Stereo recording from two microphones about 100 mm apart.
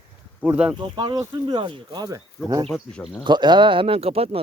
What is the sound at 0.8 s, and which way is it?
Speech, 45° right (ahead or behind).